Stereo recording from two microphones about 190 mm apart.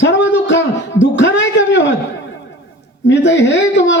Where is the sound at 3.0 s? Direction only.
70° left (ahead or behind).